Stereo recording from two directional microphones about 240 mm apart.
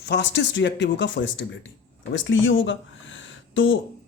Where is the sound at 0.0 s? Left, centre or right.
Left.